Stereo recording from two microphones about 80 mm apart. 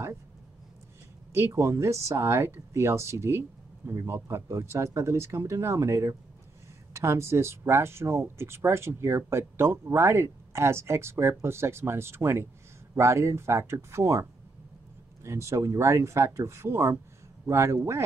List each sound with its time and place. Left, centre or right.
1.3 s speech: right
15.2 s speech: right